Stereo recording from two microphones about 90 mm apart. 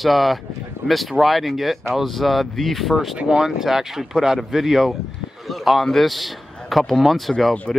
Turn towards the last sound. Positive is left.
turn(degrees=0)  # may be behind; listen again after turning